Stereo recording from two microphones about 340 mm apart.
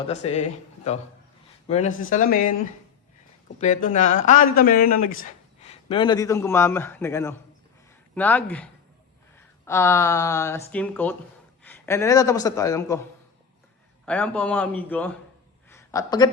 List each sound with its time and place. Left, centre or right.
0.2 s speech: centre
1.6 s speech: centre
3.6 s a man's voice: left
14.0 s a man's voice: centre
15.7 s a sound: centre